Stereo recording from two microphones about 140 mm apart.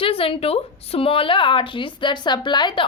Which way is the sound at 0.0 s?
40° left (ahead or behind).